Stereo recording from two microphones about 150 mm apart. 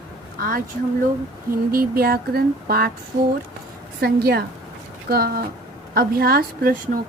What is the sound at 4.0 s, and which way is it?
A woman's voice, 90° right.